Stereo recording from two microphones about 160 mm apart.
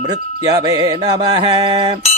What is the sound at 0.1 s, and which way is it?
Mantra, 25° right (ahead or behind).